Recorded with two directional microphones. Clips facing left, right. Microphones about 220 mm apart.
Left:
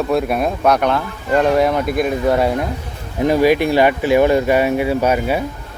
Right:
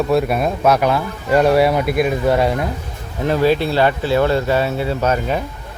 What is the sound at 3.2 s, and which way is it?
Speech, 15° left (ahead or behind).